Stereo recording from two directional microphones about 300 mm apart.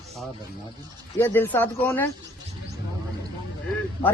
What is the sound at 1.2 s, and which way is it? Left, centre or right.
Speech, centre.